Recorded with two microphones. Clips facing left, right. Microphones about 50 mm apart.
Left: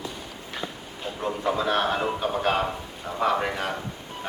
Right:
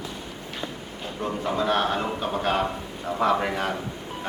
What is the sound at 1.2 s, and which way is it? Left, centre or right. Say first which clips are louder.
A man's voice: even; centre.